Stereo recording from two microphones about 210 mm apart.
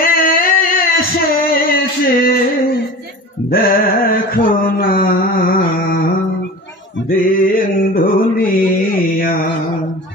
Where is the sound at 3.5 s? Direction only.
40° left (ahead or behind).